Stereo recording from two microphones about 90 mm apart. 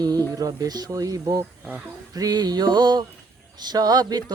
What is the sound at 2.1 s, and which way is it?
Speech, 45° right (ahead or behind).